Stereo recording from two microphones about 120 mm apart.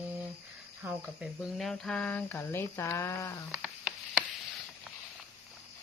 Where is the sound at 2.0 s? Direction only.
15° left (ahead or behind).